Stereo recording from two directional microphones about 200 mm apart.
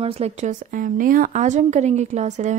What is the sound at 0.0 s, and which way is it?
A woman's voice, 30° right (ahead or behind).